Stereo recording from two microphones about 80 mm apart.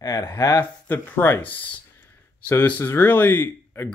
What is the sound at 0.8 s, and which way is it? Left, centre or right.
Speech, left.